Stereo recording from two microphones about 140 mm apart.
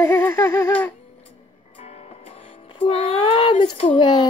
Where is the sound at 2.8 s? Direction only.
45° left (ahead or behind).